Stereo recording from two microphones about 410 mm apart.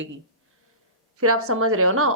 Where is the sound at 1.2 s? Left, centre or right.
Right.